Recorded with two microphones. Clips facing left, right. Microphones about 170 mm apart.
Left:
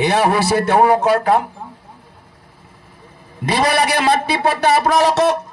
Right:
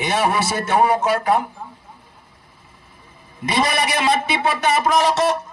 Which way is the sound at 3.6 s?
65° left (ahead or behind).